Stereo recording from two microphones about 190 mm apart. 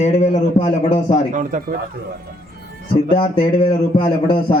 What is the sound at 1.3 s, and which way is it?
Speech, 45° right (ahead or behind).